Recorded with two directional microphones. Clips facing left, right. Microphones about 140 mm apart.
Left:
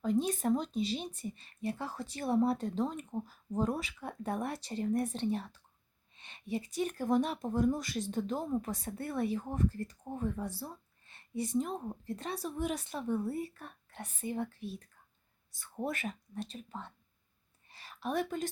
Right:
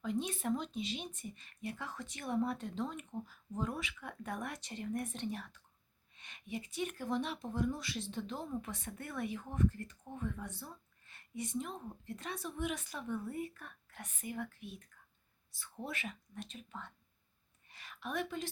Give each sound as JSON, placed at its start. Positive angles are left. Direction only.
{"t": 0.0, "sound": "speech", "side_deg": 40}
{"t": 15.5, "sound": "a woman's voice", "side_deg": 50}